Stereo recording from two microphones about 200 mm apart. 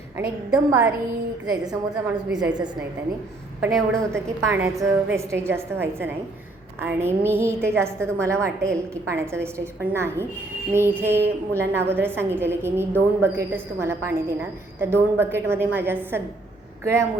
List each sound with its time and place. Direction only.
0.2 s a woman's voice: 5° right (ahead or behind)
2.0 s a woman's voice: 5° right (ahead or behind)
3.6 s a woman's voice: 15° right (ahead or behind)